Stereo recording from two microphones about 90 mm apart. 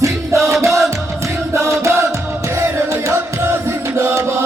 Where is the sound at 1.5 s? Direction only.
35° right (ahead or behind).